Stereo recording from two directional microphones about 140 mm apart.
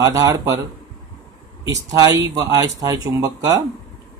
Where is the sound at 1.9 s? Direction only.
25° right (ahead or behind).